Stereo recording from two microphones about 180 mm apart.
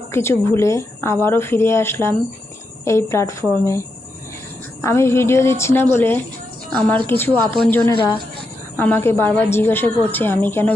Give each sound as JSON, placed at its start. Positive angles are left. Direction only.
{"t": 0.1, "sound": "a woman's voice", "side_deg": 15}
{"t": 7.9, "sound": "a woman's voice", "side_deg": 25}
{"t": 8.7, "sound": "a woman's voice", "side_deg": 10}